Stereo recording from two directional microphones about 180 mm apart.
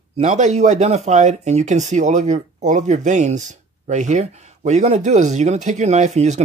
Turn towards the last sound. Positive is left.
turn(degrees=-40)  # may be behind; listen again after turning